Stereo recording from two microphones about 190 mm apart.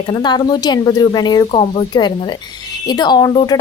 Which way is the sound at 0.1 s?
25° left (ahead or behind).